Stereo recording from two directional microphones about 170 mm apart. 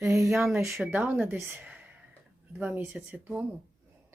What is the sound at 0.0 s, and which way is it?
A woman's voice, 15° right (ahead or behind).